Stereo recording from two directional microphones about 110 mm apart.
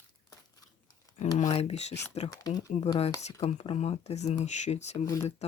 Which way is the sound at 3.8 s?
85° left.